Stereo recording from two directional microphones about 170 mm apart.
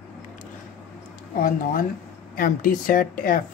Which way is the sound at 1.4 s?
55° left (ahead or behind).